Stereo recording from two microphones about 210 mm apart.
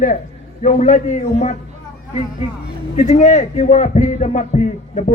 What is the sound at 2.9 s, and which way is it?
A man's voice, 35° left (ahead or behind).